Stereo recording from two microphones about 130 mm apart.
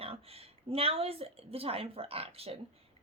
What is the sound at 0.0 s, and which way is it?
A woman's voice, 50° right (ahead or behind).